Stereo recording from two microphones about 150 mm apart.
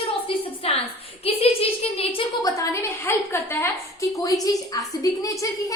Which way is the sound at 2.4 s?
20° left (ahead or behind).